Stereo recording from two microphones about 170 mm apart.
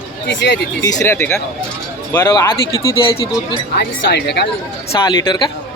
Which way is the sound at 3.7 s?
80° left.